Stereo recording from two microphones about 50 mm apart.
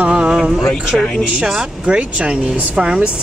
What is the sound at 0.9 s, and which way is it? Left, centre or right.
Speech, centre.